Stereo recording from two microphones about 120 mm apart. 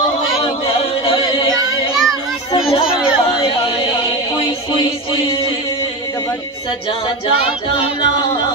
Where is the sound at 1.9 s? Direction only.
5° right (ahead or behind).